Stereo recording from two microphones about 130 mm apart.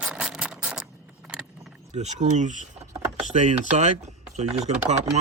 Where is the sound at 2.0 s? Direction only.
65° right (ahead or behind).